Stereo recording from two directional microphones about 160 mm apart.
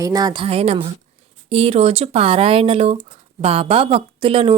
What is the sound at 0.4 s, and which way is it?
Speech, 40° right (ahead or behind).